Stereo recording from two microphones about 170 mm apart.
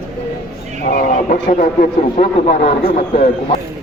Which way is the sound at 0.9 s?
50° left (ahead or behind).